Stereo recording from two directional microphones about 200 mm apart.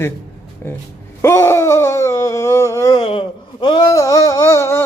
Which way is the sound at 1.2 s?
15° left (ahead or behind).